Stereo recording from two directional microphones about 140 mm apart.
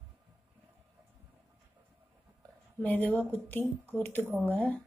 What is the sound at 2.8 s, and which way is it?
Speech, 10° left (ahead or behind).